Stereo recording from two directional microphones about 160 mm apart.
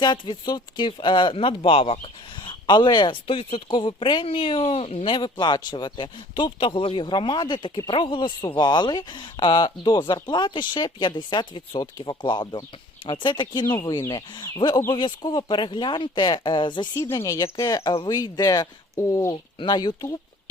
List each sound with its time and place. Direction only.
0.0 s speech: 30° left (ahead or behind)